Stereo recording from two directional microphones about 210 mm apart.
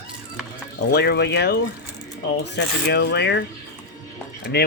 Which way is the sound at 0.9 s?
50° left (ahead or behind).